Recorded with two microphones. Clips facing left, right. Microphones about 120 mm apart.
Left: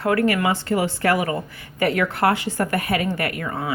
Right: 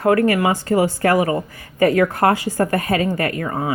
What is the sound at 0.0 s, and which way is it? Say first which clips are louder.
A woman's voice: right 4 dB; 40° right (ahead or behind).